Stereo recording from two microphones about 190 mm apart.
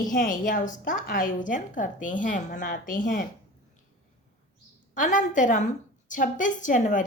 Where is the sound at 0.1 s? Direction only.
45° left (ahead or behind).